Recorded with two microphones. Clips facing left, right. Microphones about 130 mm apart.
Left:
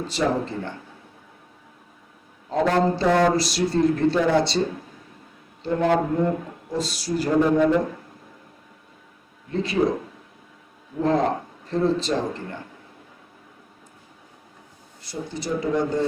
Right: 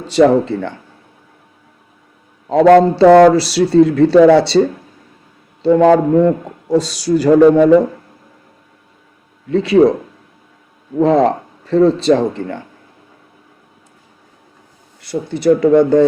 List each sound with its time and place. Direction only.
0.1 s a man's voice: 75° right (ahead or behind)
2.5 s speech: 80° right
5.6 s a man's voice: 90° right
9.5 s speech: 85° right
11.0 s a man's voice: 85° right
15.0 s speech: 65° right (ahead or behind)